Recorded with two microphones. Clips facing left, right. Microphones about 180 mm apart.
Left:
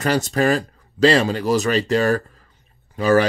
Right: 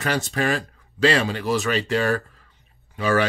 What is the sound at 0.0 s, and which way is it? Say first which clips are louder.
Speech: left 5 dB; 40° left (ahead or behind).